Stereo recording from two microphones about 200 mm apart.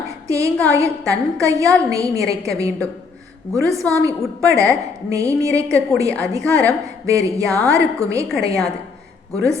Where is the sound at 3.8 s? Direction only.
10° left (ahead or behind).